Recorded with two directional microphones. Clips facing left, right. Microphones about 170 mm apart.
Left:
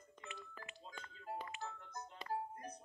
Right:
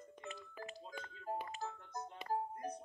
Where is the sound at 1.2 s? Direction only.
40° right (ahead or behind).